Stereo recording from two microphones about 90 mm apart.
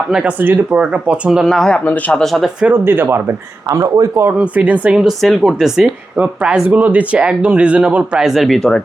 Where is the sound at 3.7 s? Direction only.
40° right (ahead or behind).